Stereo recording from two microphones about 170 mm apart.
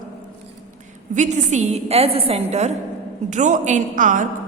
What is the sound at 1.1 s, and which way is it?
A woman's voice, 45° right (ahead or behind).